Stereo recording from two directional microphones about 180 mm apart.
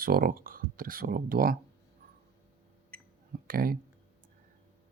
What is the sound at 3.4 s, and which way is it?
Speech, 50° right (ahead or behind).